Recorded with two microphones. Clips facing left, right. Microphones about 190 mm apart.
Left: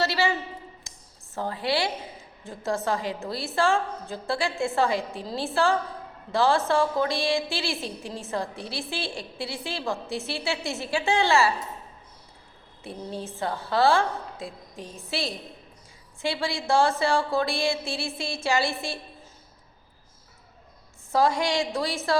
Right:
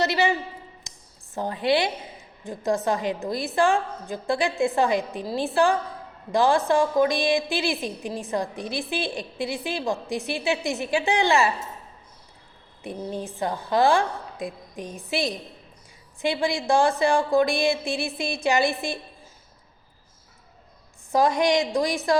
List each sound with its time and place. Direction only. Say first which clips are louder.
0.0 s a woman's voice: right 2 dB; 20° right (ahead or behind)
0.9 s a sound: right 1 dB; 15° right (ahead or behind)
2.4 s a woman's voice: right 4 dB; 15° right (ahead or behind)
12.8 s a woman's voice: right 3 dB; 15° right (ahead or behind)
21.1 s a woman's voice: right 3 dB; 15° right (ahead or behind)